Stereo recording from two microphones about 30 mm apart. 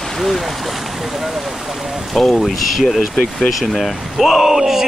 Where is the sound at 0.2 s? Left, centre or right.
Centre.